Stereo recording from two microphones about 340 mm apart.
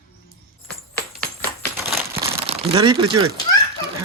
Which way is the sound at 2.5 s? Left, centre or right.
Centre.